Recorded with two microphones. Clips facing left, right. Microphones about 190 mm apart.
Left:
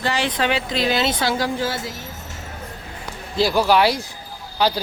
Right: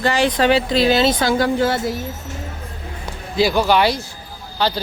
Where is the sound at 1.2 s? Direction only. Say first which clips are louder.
Right 5 dB; 55° right (ahead or behind).